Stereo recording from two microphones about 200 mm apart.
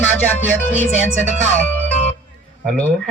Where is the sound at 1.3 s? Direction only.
40° right (ahead or behind).